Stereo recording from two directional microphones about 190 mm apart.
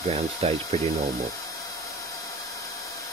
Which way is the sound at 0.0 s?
35° right (ahead or behind).